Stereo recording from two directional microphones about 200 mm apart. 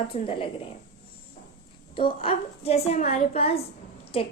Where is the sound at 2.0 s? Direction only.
30° left (ahead or behind).